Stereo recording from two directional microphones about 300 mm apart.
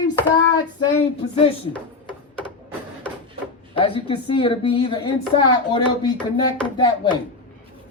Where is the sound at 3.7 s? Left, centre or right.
Centre.